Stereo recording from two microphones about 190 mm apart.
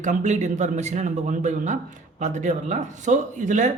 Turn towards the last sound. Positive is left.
turn(degrees=-40)  # may be behind; listen again after turning